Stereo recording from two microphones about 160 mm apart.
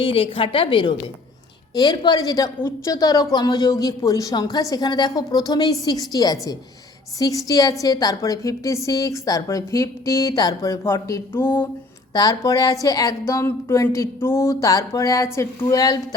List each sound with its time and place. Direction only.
0.0 s a woman's voice: 35° left (ahead or behind)